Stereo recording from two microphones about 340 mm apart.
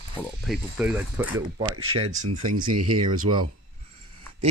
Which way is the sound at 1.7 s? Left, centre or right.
Right.